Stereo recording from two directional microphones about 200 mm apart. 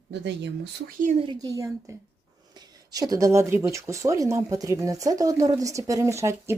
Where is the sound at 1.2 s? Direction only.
20° right (ahead or behind).